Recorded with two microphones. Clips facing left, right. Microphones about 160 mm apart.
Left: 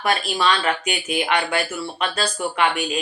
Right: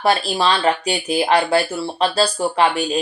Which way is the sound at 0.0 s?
30° right (ahead or behind).